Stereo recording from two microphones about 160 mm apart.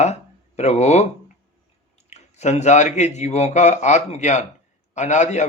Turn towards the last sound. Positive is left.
turn(degrees=45)  # may be behind; listen again after turning